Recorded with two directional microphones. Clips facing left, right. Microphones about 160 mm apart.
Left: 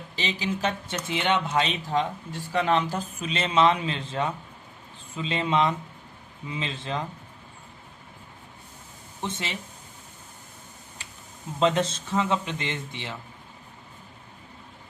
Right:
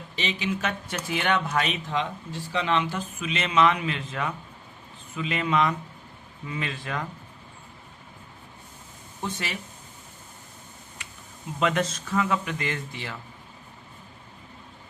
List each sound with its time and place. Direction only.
0.2 s speech: 35° left (ahead or behind)
2.5 s speech: 45° left (ahead or behind); by 7.1 s 25° left (ahead or behind)
9.2 s speech: 20° left (ahead or behind)
11.0 s a sound: 30° left (ahead or behind)
11.6 s speech: 30° left (ahead or behind)